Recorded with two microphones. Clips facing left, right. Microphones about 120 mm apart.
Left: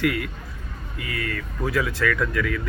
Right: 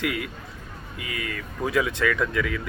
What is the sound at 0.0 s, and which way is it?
Speech, 20° right (ahead or behind).